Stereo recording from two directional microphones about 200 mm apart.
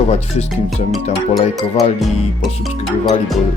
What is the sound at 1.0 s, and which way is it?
Speech, 35° left (ahead or behind).